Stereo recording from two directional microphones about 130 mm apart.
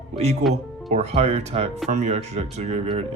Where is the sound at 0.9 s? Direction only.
55° right (ahead or behind).